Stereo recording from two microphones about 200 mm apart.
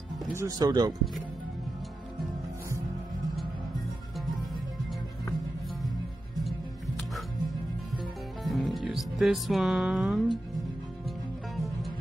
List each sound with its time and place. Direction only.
0.3 s speech: 15° right (ahead or behind)
8.0 s music: centre (ahead or behind)